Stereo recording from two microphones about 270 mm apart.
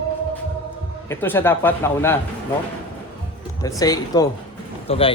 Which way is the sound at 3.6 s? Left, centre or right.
Centre.